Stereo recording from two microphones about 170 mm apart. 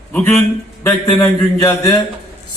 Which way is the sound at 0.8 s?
15° left (ahead or behind).